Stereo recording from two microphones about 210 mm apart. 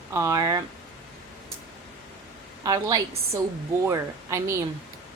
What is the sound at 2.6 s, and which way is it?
A woman's voice, 15° right (ahead or behind).